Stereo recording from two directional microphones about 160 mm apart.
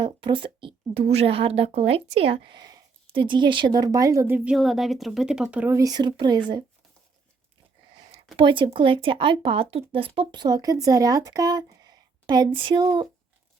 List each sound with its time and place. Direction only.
0.0 s a woman's voice: 30° right (ahead or behind); by 4.5 s 10° right (ahead or behind)
4.5 s speech: centre (ahead or behind); by 6.4 s 25° right (ahead or behind)
8.4 s a woman's voice: 30° right (ahead or behind)